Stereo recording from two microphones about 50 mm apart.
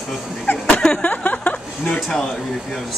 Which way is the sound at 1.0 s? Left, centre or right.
Left.